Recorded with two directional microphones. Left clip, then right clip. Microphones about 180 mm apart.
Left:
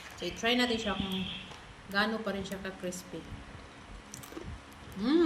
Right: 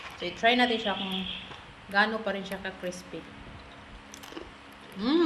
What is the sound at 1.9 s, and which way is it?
A woman's voice, 20° left (ahead or behind).